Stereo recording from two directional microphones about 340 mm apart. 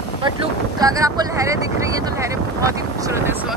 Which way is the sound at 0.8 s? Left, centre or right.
Centre.